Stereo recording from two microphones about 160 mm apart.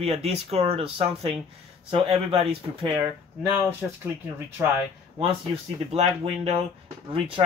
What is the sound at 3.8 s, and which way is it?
Speech, 5° right (ahead or behind).